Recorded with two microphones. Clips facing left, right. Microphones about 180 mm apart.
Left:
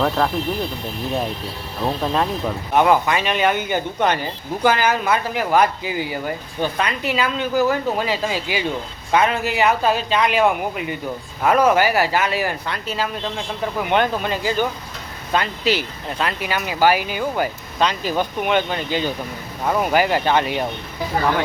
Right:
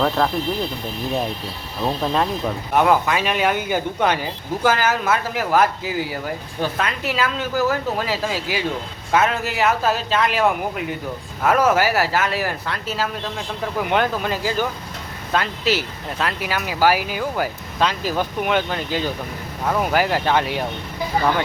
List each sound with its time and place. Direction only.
0.0 s speech: centre (ahead or behind)
1.8 s speech: centre (ahead or behind)